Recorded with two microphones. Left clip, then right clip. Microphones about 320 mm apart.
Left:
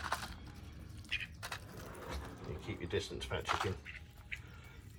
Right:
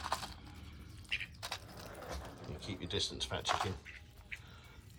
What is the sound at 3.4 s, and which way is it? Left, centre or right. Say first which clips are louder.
Speech: right 1 dB; right.